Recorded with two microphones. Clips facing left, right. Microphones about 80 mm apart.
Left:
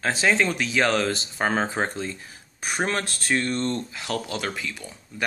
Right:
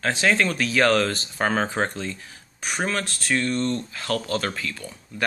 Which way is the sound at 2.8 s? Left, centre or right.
Left.